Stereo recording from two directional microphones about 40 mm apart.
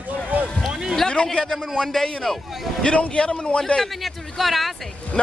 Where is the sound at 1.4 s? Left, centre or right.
Centre.